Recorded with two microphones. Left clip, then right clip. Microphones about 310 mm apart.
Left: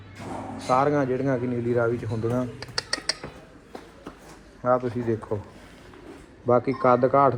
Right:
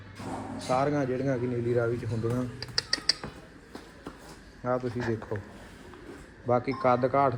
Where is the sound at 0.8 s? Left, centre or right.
Centre.